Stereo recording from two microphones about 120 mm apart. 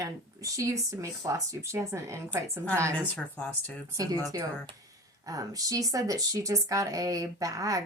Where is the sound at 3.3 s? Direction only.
15° left (ahead or behind).